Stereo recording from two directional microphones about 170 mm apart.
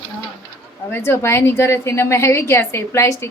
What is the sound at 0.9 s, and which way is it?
A woman's voice, 15° left (ahead or behind).